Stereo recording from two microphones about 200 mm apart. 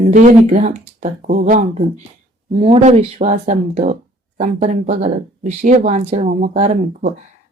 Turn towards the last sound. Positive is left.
turn(degrees=-35)  # may be behind; listen again after turning